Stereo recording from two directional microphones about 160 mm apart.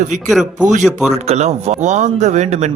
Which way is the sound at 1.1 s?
40° right (ahead or behind).